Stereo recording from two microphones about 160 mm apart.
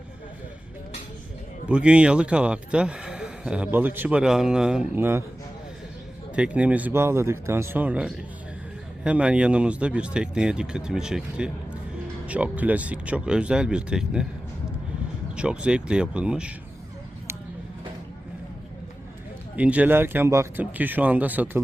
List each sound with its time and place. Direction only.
1.6 s speech: 5° right (ahead or behind)
6.3 s speech: 10° right (ahead or behind)
15.4 s speech: 5° right (ahead or behind)
19.5 s speech: 10° right (ahead or behind)